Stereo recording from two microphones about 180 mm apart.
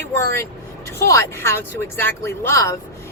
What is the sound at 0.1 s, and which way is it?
Speech, 15° left (ahead or behind).